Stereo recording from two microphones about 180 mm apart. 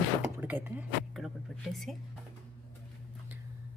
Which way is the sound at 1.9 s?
Centre (ahead or behind).